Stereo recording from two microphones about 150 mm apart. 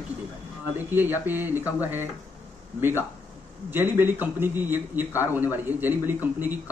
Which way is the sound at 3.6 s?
15° right (ahead or behind).